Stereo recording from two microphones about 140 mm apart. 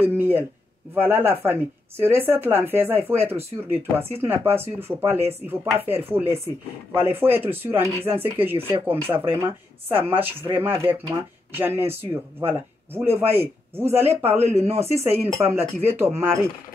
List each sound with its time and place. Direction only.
0.1 s speech: 15° right (ahead or behind)
14.7 s speech: 50° right (ahead or behind)
15.3 s speech: 15° right (ahead or behind)